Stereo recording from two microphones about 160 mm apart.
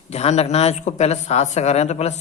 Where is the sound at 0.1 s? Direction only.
40° left (ahead or behind).